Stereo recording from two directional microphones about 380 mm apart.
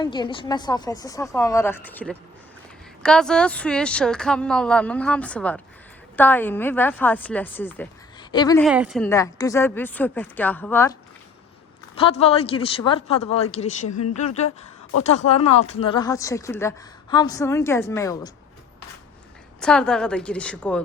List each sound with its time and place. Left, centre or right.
0.0 s a woman's voice: centre
8.6 s speech: centre
11.9 s a woman's voice: centre
13.8 s speech: left
15.3 s a woman's voice: centre
19.5 s speech: centre